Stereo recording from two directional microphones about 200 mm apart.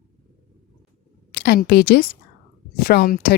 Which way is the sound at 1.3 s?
50° left (ahead or behind).